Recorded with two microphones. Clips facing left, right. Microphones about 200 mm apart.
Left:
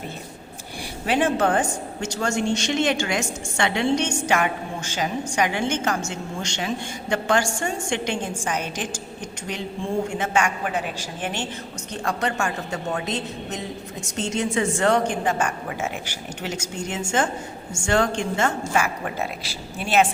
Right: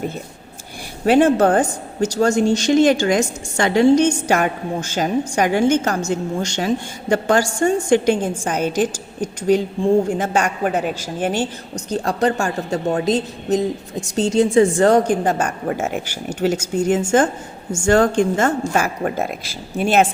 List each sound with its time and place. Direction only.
1.0 s a woman's voice: 40° right (ahead or behind)